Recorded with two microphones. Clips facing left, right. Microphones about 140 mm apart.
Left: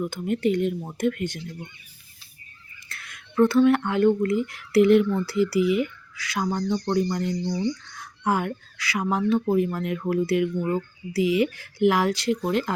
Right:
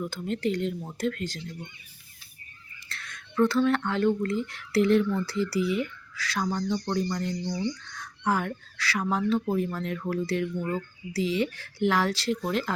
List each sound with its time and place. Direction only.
0.0 s speech: 15° left (ahead or behind)
3.5 s speech: 5° left (ahead or behind)
6.3 s speech: 20° left (ahead or behind); by 12.7 s 5° left (ahead or behind)